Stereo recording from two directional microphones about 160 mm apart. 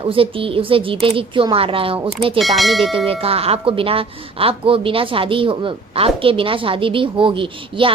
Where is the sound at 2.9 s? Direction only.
35° right (ahead or behind).